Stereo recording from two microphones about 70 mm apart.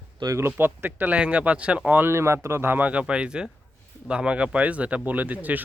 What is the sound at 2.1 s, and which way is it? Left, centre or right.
Speech, right.